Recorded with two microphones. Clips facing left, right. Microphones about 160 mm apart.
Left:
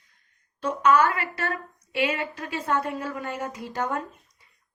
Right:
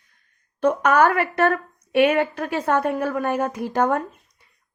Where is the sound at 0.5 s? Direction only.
60° right (ahead or behind).